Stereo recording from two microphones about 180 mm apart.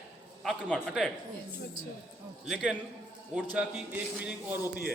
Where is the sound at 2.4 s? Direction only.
5° right (ahead or behind).